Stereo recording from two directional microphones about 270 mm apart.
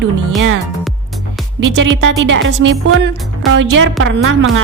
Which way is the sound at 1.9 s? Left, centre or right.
Right.